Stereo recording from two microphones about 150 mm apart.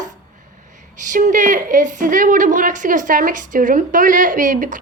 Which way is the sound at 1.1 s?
55° right (ahead or behind).